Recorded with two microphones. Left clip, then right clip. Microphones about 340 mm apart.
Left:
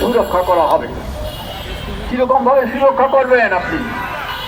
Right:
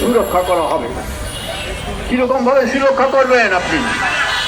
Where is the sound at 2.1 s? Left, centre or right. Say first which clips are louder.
Left 1 dB; left.